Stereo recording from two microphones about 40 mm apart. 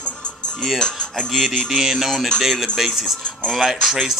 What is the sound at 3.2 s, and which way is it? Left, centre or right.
Speech, left.